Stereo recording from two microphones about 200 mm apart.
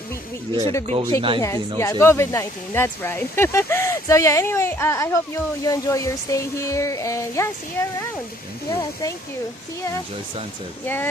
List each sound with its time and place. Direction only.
0.9 s speech: 25° right (ahead or behind)
1.4 s speech: 15° left (ahead or behind)
10.8 s speech: 10° left (ahead or behind)